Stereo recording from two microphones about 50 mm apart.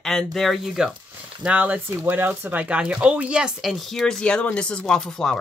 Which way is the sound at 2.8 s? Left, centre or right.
Centre.